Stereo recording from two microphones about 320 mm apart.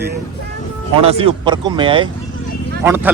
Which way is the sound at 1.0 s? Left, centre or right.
Centre.